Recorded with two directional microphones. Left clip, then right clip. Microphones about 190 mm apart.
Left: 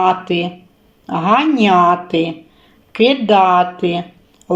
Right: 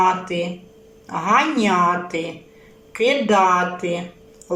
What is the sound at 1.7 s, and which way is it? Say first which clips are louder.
Speech: left 7 dB; 50° left (ahead or behind).